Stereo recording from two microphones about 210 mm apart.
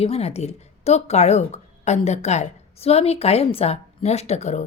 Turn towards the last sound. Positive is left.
turn(degrees=30)  # may be behind; listen again after turning